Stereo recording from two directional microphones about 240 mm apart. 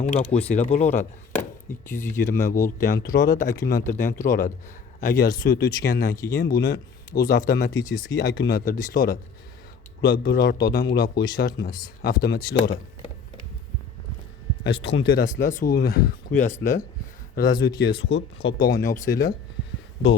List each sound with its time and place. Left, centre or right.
0.0 s speech: left
1.9 s speech: centre
2.2 s speech: left
7.7 s speech: centre
8.2 s speech: left
14.6 s speech: left
17.9 s speech: left
18.6 s speech: left